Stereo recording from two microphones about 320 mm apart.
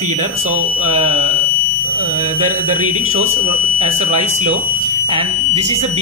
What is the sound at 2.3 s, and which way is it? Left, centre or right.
Speech, right.